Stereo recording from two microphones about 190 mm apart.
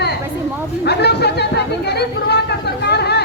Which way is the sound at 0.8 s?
60° left (ahead or behind).